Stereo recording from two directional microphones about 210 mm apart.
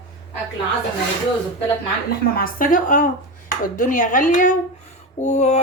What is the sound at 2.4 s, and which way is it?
A woman's voice, 40° left (ahead or behind).